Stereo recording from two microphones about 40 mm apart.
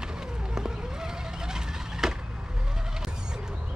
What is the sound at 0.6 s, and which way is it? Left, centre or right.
Vehicle, centre.